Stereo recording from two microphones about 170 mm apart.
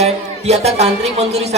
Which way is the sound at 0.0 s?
40° right (ahead or behind).